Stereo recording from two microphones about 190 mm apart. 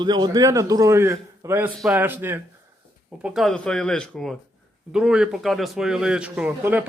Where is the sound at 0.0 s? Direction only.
25° right (ahead or behind).